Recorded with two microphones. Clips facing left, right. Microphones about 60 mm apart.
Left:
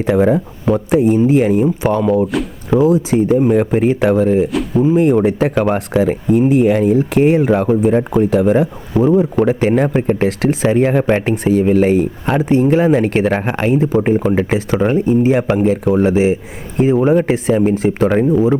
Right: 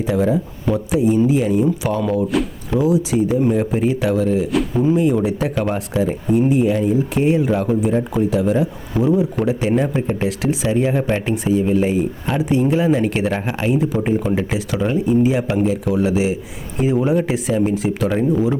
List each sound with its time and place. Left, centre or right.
0.1 s speech: left
2.0 s speech: left
4.9 s speech: left
12.5 s speech: left